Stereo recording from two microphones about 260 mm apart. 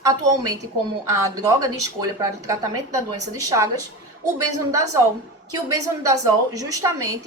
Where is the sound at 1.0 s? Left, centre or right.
Centre.